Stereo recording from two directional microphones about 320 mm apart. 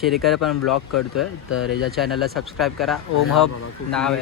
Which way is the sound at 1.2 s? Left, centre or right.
Left.